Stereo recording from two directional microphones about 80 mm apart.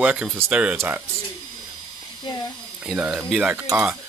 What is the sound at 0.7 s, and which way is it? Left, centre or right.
Speech, right.